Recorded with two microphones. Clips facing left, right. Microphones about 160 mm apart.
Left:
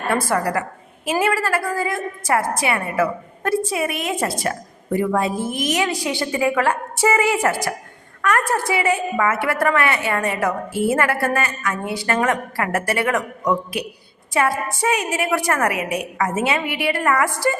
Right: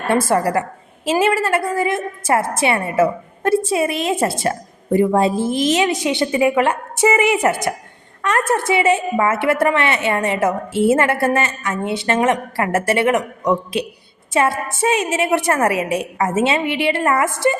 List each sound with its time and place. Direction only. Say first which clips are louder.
0.1 s a woman's voice: right 4 dB; 25° right (ahead or behind)